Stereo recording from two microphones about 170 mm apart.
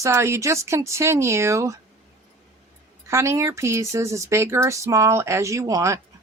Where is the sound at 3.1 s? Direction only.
15° right (ahead or behind).